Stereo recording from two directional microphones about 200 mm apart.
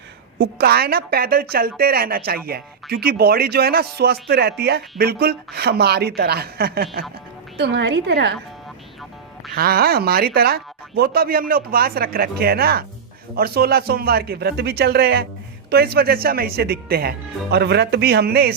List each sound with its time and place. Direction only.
0.3 s a woman's voice: 50° right (ahead or behind)
9.6 s speech: 50° right (ahead or behind)